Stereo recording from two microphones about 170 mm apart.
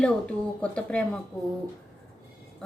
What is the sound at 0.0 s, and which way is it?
Speech, 5° left (ahead or behind).